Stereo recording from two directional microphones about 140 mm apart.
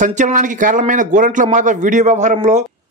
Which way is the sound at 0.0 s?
65° right (ahead or behind).